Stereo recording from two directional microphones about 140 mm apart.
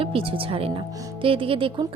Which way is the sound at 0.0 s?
40° right (ahead or behind).